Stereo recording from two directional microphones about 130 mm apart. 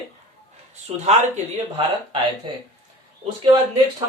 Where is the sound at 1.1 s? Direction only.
60° right (ahead or behind).